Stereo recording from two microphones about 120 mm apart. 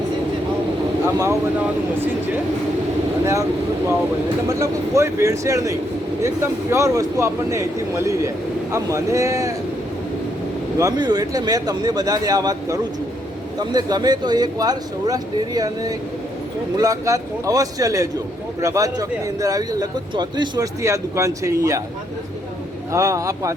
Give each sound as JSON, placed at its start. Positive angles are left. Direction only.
{"t": 1.0, "sound": "a man's voice", "side_deg": -25}
{"t": 4.4, "sound": "a man's voice", "side_deg": -25}
{"t": 10.8, "sound": "a man's voice", "side_deg": -30}
{"t": 20.8, "sound": "a man's voice", "side_deg": -25}
{"t": 22.9, "sound": "a man's voice", "side_deg": -25}